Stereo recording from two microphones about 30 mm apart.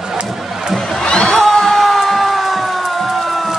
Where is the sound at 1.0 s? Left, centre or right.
Left.